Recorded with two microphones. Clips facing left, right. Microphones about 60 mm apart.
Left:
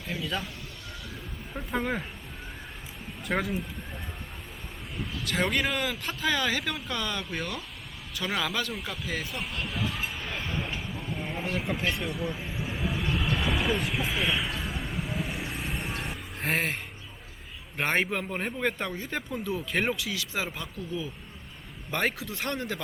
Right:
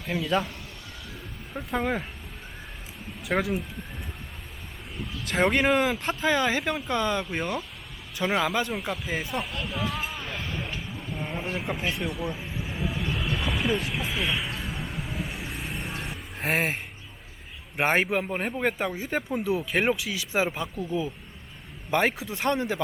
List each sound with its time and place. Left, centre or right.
0.0 s speech: centre
1.5 s speech: centre
3.2 s speech: centre
5.2 s speech: right
9.3 s speech: centre
10.8 s a sound: centre
11.6 s speech: centre
11.9 s vehicle: centre
17.7 s speech: centre